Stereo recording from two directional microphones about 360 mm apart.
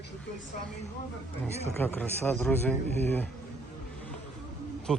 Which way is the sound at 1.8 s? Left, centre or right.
Centre.